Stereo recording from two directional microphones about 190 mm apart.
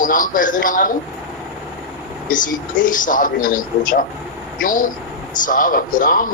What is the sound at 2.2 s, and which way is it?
Speech, 45° left (ahead or behind).